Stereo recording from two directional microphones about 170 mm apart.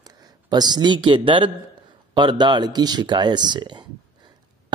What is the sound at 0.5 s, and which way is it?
Speech, 25° right (ahead or behind).